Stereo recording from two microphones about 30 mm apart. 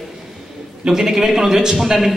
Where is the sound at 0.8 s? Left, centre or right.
Centre.